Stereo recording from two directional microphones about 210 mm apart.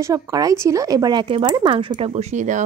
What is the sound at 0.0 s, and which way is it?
Speech, 15° right (ahead or behind).